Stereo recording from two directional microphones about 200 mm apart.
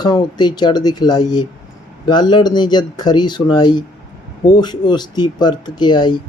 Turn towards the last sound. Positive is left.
turn(degrees=20)  # may be behind; listen again after turning